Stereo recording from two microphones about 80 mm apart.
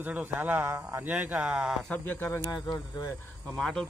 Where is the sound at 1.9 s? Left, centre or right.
Left.